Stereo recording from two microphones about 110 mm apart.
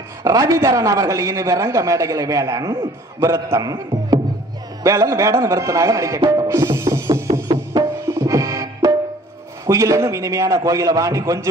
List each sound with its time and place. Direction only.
0.2 s a man's voice: 30° right (ahead or behind)
6.3 s music: 30° right (ahead or behind)
9.7 s a man's voice: 25° right (ahead or behind)